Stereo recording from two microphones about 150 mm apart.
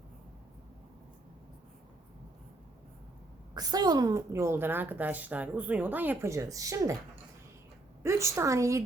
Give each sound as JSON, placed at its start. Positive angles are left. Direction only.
{"t": 3.5, "sound": "a woman's voice", "side_deg": -25}
{"t": 8.0, "sound": "speech", "side_deg": -20}